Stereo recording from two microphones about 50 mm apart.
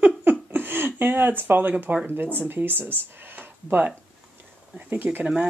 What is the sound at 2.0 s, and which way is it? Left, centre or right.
Speech, right.